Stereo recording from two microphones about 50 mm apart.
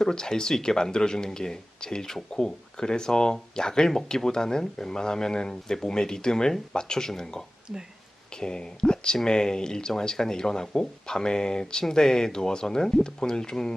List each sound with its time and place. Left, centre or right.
0.0 s speech: centre